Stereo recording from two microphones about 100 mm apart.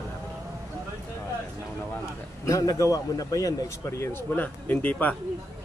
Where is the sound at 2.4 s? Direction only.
35° left (ahead or behind).